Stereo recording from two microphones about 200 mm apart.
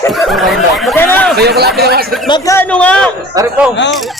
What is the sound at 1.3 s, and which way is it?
Speech, 55° right (ahead or behind).